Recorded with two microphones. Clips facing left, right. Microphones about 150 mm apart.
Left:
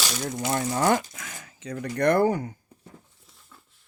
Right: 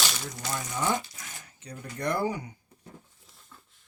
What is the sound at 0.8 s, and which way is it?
Speech, 85° left.